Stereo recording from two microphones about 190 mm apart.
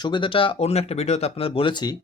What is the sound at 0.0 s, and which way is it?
Speech, 25° left (ahead or behind).